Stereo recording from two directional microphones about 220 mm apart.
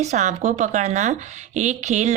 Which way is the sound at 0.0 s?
30° right (ahead or behind).